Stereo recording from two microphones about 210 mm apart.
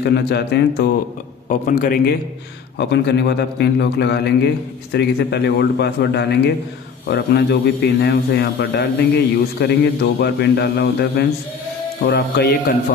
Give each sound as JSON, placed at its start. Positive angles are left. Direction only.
{"t": 0.0, "sound": "a man's voice", "side_deg": 50}
{"t": 1.5, "sound": "a man's voice", "side_deg": 40}
{"t": 2.8, "sound": "a man's voice", "side_deg": 55}